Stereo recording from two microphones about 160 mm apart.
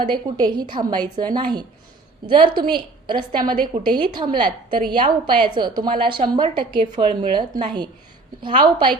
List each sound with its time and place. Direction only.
0.0 s a woman's voice: 25° right (ahead or behind)